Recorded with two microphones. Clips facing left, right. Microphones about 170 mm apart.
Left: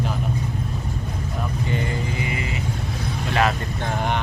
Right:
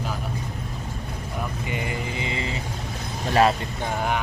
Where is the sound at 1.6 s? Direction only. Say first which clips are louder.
Left 3 dB; 15° right (ahead or behind).